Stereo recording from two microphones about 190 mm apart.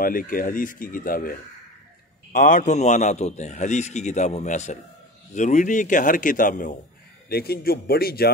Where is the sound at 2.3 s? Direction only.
45° left (ahead or behind).